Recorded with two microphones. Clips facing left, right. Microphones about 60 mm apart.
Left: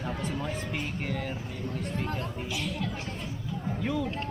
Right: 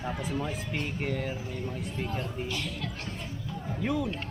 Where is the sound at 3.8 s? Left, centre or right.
Centre.